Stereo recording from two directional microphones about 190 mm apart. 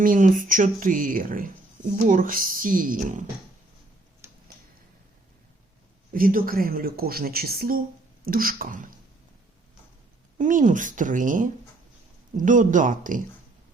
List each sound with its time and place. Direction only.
0.0 s a woman's voice: 45° right (ahead or behind)
6.1 s a woman's voice: 50° right (ahead or behind)
10.3 s a woman's voice: 40° right (ahead or behind)